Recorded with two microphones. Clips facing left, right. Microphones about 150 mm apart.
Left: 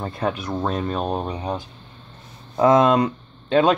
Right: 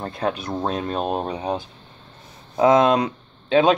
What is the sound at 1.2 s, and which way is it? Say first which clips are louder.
Speech: right 2 dB; 20° right (ahead or behind).